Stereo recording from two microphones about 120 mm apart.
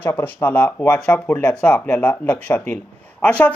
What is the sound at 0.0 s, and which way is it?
Speech, 15° left (ahead or behind).